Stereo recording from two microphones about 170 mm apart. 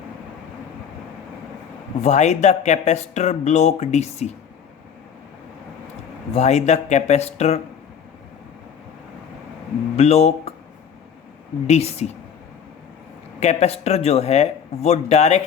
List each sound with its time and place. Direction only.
2.0 s speech: 40° left (ahead or behind)
6.3 s speech: 40° left (ahead or behind)
9.9 s speech: 40° left (ahead or behind)
11.6 s speech: 40° left (ahead or behind)
13.4 s speech: 40° left (ahead or behind)